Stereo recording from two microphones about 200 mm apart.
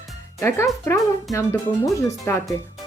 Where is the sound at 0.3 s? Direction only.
15° left (ahead or behind).